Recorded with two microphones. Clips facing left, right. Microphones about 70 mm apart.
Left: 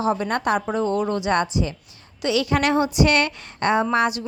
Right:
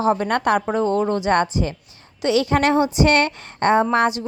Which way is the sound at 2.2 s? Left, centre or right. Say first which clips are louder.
Right 3 dB; right.